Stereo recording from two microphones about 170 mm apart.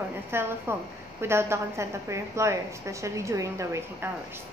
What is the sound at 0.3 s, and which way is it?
A woman's voice, 15° right (ahead or behind).